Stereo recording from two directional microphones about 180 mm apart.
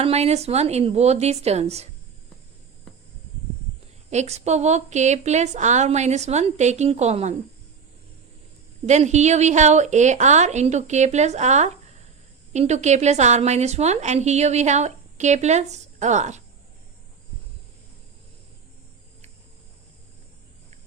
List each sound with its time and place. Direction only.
0.0 s a woman's voice: 35° right (ahead or behind)
4.1 s a woman's voice: 40° right (ahead or behind)
8.9 s a woman's voice: 40° right (ahead or behind)